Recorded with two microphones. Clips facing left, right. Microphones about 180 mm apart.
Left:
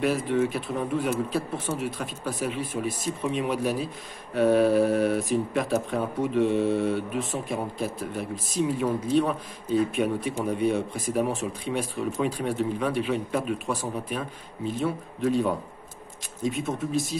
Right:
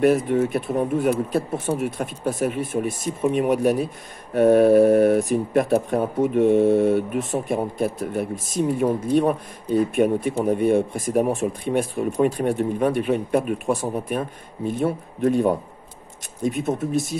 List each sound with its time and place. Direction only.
0.0 s speech: 50° right (ahead or behind)